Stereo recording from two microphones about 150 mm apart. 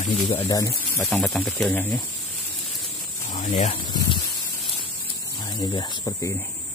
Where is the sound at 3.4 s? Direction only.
55° left (ahead or behind).